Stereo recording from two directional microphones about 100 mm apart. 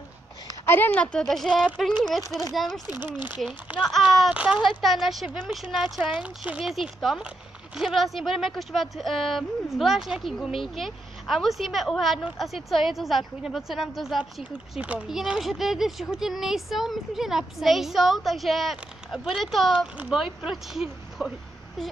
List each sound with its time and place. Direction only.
0.7 s speech: 20° left (ahead or behind); by 2.8 s centre (ahead or behind)
3.1 s speech: 20° right (ahead or behind)
3.9 s speech: centre (ahead or behind)
4.3 s speech: 10° right (ahead or behind)
4.6 s speech: centre (ahead or behind)
6.6 s speech: centre (ahead or behind)